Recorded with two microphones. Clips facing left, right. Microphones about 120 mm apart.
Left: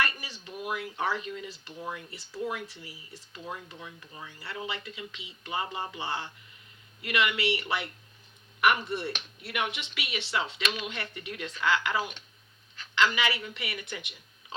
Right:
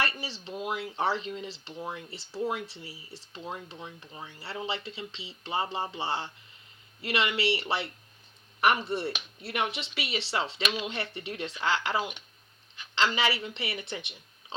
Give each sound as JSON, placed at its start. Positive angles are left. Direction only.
{"t": 0.0, "sound": "speech", "side_deg": -30}